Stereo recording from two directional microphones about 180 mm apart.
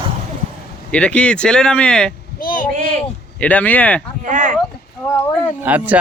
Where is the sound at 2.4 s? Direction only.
50° left (ahead or behind).